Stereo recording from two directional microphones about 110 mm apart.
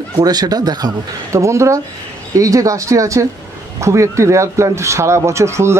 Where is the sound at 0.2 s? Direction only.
35° right (ahead or behind).